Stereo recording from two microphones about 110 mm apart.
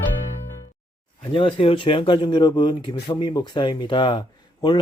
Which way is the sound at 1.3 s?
55° left (ahead or behind).